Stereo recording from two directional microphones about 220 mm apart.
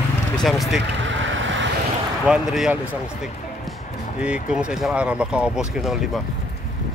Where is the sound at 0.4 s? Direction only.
Centre (ahead or behind).